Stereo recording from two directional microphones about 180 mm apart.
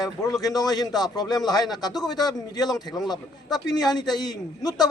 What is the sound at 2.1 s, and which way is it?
Speech, 20° left (ahead or behind).